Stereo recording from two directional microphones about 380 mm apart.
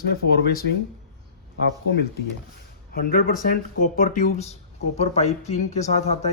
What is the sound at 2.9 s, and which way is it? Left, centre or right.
Speech, left.